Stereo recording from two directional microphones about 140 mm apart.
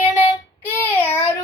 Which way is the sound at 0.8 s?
15° left (ahead or behind).